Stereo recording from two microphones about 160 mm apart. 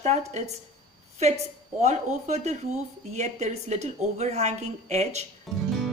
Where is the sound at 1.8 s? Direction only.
45° right (ahead or behind).